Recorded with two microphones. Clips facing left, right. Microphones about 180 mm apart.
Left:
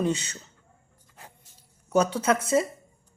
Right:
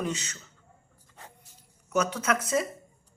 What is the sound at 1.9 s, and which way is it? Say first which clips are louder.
Speech: left 4 dB; 30° left (ahead or behind).